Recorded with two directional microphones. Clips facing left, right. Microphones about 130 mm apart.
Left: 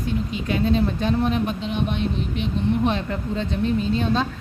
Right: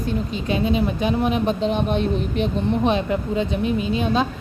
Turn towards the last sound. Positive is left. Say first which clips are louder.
# right 1 dB
turn(degrees=-15)  # may be behind; listen again after turning